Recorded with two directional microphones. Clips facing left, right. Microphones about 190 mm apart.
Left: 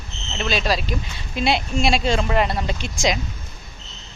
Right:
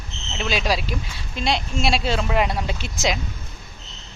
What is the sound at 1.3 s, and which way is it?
A woman's voice, 5° left (ahead or behind).